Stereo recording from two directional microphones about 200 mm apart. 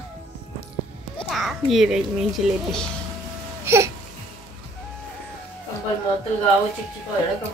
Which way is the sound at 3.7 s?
15° right (ahead or behind).